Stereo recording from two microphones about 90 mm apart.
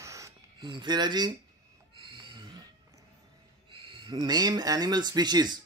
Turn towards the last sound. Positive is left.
turn(degrees=-50)  # may be behind; listen again after turning